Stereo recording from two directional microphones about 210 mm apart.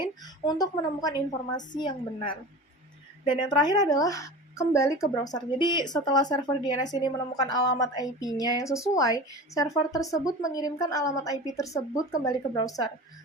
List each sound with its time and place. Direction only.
0.0 s a woman's voice: 20° left (ahead or behind)